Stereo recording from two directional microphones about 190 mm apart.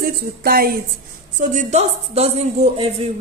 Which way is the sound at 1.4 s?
40° right (ahead or behind).